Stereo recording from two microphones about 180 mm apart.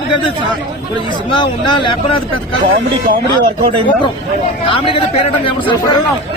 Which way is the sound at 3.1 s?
55° right (ahead or behind).